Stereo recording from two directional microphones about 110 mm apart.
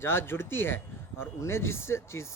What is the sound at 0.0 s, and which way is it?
Speech, 20° left (ahead or behind).